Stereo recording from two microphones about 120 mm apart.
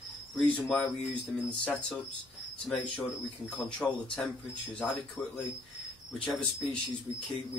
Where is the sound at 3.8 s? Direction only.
Centre (ahead or behind).